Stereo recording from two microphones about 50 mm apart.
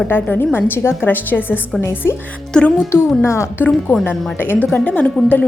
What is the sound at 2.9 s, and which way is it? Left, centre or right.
Speech, left.